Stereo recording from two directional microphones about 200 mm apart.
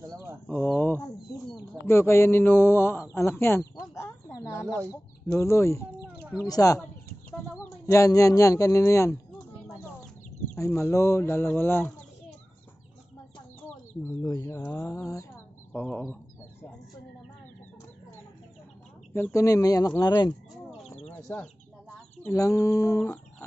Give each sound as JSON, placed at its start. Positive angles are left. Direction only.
{"t": 0.5, "sound": "a man's voice", "side_deg": 10}
{"t": 3.8, "sound": "a sound", "side_deg": 15}
{"t": 5.3, "sound": "a man's voice", "side_deg": 15}
{"t": 10.5, "sound": "a man's voice", "side_deg": 15}
{"t": 13.6, "sound": "speech", "side_deg": 15}
{"t": 19.1, "sound": "a man's voice", "side_deg": 15}
{"t": 21.1, "sound": "chicken", "side_deg": 10}
{"t": 22.2, "sound": "a man's voice", "side_deg": 15}